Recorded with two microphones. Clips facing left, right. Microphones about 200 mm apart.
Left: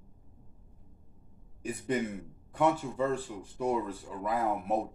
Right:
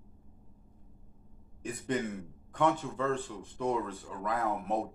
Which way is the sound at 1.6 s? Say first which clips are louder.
Left 2 dB; 10° left (ahead or behind).